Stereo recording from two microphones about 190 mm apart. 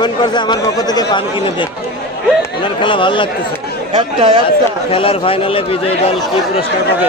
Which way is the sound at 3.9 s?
30° right (ahead or behind).